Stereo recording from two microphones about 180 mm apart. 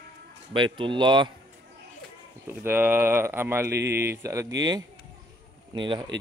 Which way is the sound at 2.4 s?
10° right (ahead or behind).